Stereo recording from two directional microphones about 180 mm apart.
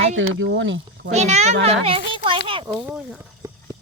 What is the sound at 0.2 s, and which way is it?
Speech, 90° right.